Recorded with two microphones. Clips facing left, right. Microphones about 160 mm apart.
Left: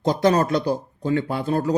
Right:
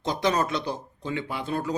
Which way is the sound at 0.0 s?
45° left (ahead or behind).